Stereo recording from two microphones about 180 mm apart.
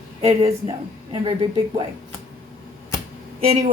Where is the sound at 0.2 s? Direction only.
35° right (ahead or behind).